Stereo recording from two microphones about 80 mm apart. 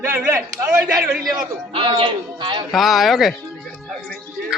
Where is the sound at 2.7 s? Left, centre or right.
Centre.